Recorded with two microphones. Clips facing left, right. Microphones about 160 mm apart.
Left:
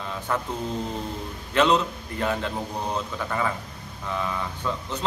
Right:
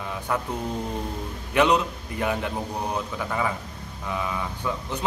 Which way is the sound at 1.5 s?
15° right (ahead or behind).